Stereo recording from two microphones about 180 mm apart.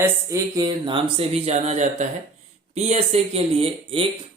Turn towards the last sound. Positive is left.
turn(degrees=-30)  # may be behind; listen again after turning